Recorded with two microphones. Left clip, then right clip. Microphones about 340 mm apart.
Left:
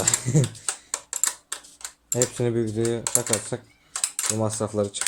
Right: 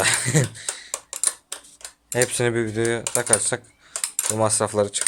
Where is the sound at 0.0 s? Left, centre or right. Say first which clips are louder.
Right 4 dB; right.